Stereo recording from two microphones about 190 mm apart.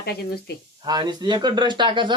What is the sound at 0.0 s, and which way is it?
Speech, 60° left (ahead or behind).